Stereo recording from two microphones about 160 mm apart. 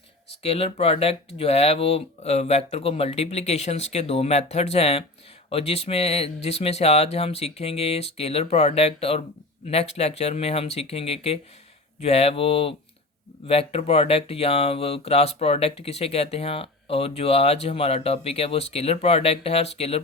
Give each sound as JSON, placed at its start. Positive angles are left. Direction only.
{"t": 0.4, "sound": "speech", "side_deg": 40}